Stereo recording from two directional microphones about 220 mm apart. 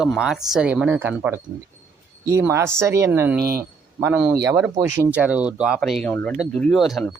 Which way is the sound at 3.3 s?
45° right (ahead or behind).